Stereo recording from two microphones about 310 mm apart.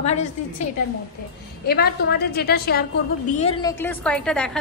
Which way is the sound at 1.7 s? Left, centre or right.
Left.